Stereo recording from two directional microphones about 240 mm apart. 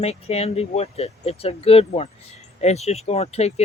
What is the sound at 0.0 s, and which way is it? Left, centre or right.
Speech, left.